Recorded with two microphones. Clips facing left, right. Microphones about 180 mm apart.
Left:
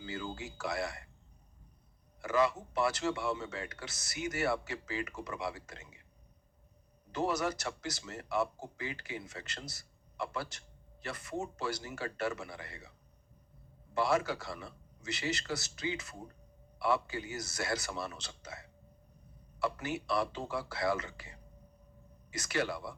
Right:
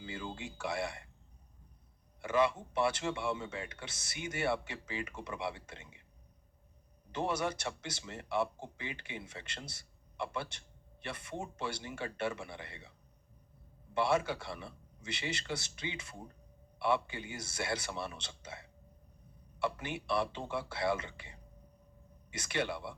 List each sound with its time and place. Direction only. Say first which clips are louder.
0.1 s speech: left 2 dB; 25° right (ahead or behind)
2.2 s speech: even; 30° right (ahead or behind)
7.1 s speech: left 2 dB; 25° right (ahead or behind)
13.9 s speech: even; 25° right (ahead or behind)